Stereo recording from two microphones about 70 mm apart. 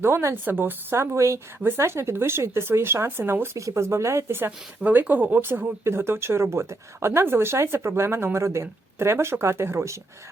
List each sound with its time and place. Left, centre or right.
0.0 s speech: right